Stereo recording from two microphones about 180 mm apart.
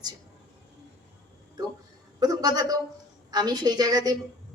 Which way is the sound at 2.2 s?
20° right (ahead or behind).